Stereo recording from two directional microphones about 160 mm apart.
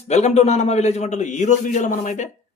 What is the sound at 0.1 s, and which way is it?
Speech, 45° left (ahead or behind).